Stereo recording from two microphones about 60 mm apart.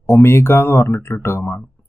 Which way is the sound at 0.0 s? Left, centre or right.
Left.